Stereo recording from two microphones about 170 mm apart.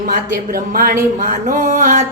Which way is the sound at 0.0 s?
60° right (ahead or behind).